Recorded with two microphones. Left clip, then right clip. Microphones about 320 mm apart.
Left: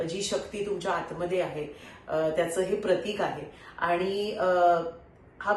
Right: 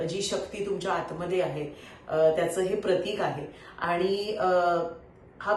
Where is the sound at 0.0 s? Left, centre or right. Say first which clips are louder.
Even; centre.